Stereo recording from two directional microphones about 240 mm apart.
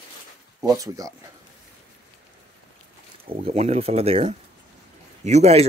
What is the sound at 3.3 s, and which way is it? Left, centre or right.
Speech, right.